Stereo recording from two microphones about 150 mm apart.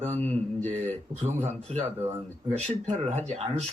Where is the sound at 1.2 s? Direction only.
50° right (ahead or behind).